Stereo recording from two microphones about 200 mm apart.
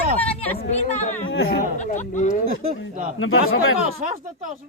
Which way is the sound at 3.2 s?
90° left.